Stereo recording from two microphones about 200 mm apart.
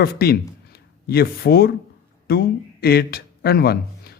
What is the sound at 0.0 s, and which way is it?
Speech, 50° left (ahead or behind).